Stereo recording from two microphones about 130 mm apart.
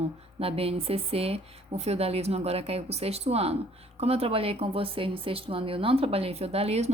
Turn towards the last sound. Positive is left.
turn(degrees=-55)  # may be behind; listen again after turning